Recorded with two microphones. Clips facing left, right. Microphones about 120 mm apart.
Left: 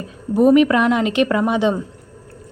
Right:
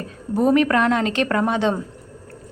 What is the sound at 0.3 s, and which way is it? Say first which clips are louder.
A woman's voice: left 4 dB; 15° left (ahead or behind).